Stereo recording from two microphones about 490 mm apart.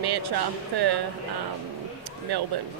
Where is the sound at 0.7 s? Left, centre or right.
Right.